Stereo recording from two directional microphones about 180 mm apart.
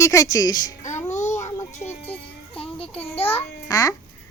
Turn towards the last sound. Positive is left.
turn(degrees=20)  # may be behind; listen again after turning